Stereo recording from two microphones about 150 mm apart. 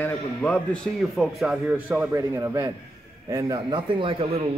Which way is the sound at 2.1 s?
20° right (ahead or behind).